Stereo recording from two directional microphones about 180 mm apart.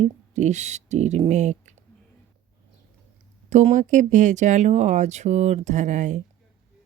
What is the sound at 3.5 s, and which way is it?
Speech, 40° right (ahead or behind).